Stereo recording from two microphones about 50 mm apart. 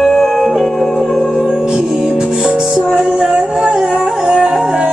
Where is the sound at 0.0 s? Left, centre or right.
Centre.